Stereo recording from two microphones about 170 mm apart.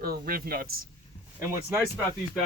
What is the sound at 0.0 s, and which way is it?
Speech, 60° right (ahead or behind).